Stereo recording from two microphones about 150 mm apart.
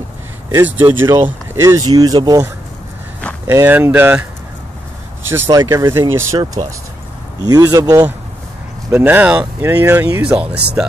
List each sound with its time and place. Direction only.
0.5 s speech: 15° right (ahead or behind)
3.4 s speech: 15° right (ahead or behind)
5.2 s speech: 15° right (ahead or behind)
8.9 s speech: 10° right (ahead or behind)